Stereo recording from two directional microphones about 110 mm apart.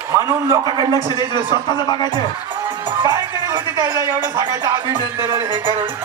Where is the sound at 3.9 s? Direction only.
20° right (ahead or behind).